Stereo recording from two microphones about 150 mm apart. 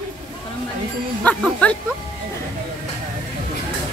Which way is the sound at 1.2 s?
10° left (ahead or behind).